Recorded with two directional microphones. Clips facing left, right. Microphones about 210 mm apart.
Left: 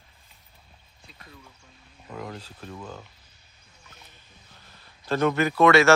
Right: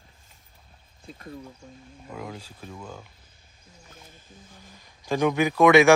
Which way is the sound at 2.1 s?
5° right (ahead or behind).